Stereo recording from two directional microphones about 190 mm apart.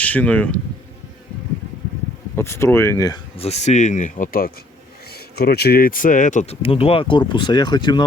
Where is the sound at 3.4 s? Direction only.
35° left (ahead or behind).